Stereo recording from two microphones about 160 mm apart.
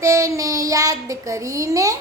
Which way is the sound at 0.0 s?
20° right (ahead or behind).